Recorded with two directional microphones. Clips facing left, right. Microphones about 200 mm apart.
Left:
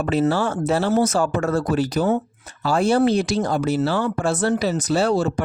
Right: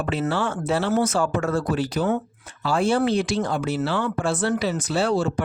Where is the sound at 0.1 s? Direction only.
40° left (ahead or behind).